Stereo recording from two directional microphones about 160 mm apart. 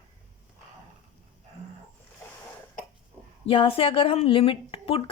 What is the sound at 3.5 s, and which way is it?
Speech, 35° left (ahead or behind).